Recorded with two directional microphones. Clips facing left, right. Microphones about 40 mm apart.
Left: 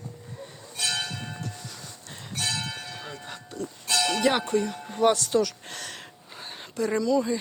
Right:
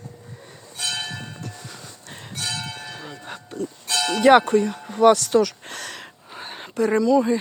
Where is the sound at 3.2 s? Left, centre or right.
Right.